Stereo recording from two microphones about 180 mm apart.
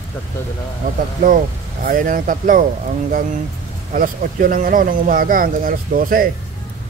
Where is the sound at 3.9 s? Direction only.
50° right (ahead or behind).